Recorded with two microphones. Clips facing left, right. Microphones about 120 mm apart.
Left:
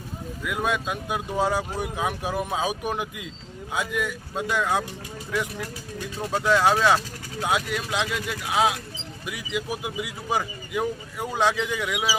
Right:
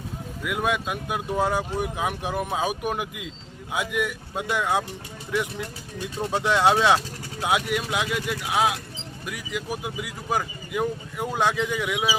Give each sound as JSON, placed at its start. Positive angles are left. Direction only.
{"t": 0.4, "sound": "speech", "side_deg": -5}
{"t": 5.3, "sound": "speech", "side_deg": -20}